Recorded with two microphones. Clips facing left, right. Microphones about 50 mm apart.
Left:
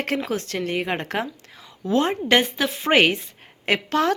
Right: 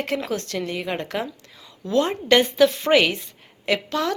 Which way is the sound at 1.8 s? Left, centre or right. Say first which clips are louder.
Even; left.